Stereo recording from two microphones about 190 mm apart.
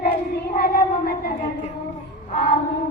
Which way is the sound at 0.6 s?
50° left (ahead or behind).